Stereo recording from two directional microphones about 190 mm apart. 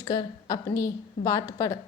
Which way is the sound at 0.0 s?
20° left (ahead or behind).